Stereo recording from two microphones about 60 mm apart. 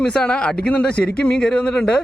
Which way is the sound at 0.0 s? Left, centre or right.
Centre.